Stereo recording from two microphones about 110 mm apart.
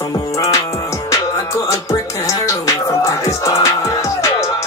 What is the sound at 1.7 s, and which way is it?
Music, 30° left (ahead or behind).